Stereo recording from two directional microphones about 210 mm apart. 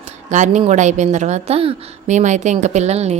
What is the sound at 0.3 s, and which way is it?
A woman's voice, 35° right (ahead or behind).